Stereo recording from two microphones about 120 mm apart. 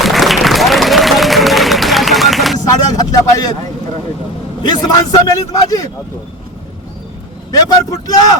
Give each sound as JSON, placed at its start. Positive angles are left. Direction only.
{"t": 0.0, "sound": "music", "side_deg": 0}
{"t": 2.6, "sound": "vehicle", "side_deg": 30}
{"t": 4.6, "sound": "a man's voice", "side_deg": 35}
{"t": 7.9, "sound": "a man's voice", "side_deg": 30}